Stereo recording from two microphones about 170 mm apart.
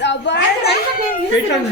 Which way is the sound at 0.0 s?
90° left.